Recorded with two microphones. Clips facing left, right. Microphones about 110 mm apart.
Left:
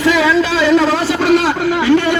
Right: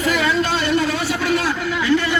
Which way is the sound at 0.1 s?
90° left.